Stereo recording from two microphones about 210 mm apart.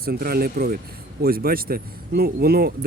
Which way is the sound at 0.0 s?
45° right (ahead or behind).